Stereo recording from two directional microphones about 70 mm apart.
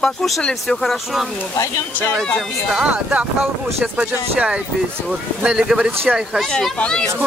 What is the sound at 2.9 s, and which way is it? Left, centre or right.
Speech, centre.